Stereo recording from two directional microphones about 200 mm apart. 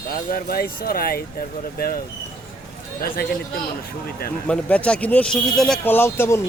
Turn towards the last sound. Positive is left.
turn(degrees=10)  # may be behind; listen again after turning